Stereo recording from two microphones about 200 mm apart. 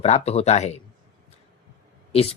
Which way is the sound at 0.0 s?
30° left (ahead or behind).